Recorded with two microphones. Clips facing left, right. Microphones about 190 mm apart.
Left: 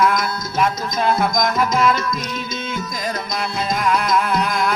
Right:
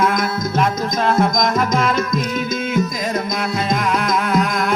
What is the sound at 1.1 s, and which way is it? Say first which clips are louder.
Music: right 2 dB; 5° left (ahead or behind).